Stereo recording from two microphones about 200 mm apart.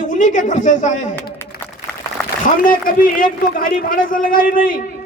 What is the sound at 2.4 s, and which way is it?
A man's voice, 45° left (ahead or behind).